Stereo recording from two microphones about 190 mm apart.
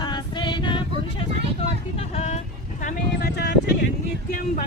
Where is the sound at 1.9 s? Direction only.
35° left (ahead or behind).